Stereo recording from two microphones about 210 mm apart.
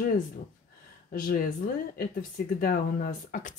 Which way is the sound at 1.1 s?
40° left (ahead or behind).